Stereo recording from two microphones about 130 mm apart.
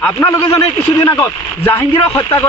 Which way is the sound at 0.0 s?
20° left (ahead or behind).